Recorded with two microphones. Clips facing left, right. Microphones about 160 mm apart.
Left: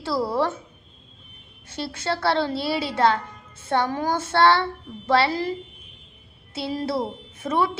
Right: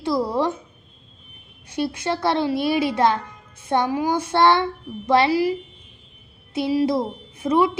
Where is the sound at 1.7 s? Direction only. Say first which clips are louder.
Right 4 dB; 15° right (ahead or behind).